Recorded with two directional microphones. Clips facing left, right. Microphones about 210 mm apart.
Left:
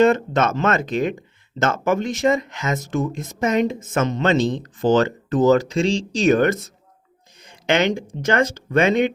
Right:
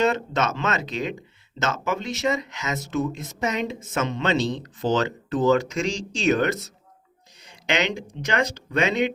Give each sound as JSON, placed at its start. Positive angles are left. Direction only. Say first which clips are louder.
{"t": 0.0, "sound": "speech", "louder": "left 6 dB", "side_deg": 50}